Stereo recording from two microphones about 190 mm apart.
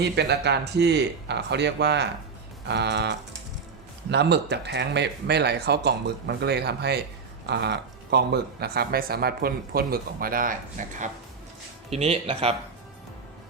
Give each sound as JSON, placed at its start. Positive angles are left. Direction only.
{"t": 0.0, "sound": "speech", "side_deg": -60}